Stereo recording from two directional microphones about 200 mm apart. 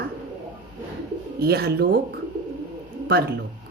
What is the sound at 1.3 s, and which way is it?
Speech, 50° right (ahead or behind).